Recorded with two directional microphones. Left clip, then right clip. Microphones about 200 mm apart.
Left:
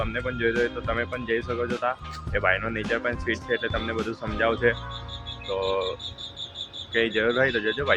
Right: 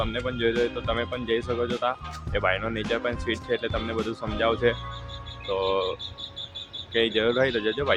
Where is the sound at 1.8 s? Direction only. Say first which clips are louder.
Even; 20° right (ahead or behind).